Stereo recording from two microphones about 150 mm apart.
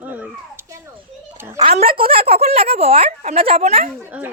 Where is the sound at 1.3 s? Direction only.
15° right (ahead or behind).